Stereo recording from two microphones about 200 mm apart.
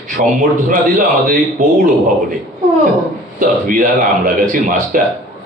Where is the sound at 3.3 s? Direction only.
45° right (ahead or behind).